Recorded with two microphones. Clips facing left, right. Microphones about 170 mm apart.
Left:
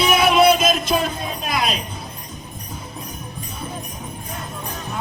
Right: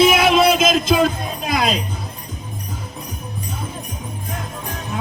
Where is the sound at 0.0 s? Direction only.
90° right.